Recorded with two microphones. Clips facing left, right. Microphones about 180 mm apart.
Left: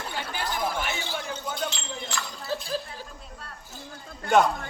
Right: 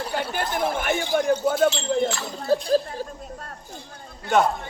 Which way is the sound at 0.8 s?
50° right (ahead or behind).